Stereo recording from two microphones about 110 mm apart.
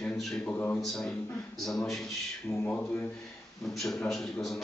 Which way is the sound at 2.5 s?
15° left (ahead or behind).